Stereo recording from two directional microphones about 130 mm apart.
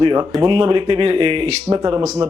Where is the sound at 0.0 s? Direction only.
35° right (ahead or behind); by 1.8 s 50° right (ahead or behind).